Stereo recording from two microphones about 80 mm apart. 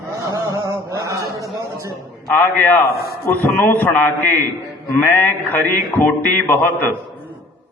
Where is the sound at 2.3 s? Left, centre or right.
Left.